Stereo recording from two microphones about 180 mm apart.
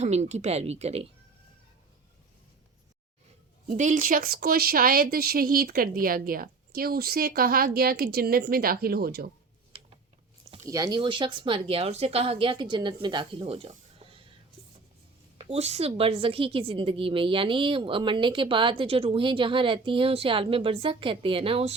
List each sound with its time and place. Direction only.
0.0 s speech: 40° right (ahead or behind)
3.7 s a woman's voice: 40° right (ahead or behind); by 9.3 s 60° right (ahead or behind)
10.7 s a woman's voice: 20° right (ahead or behind)
15.4 s a woman's voice: 35° right (ahead or behind)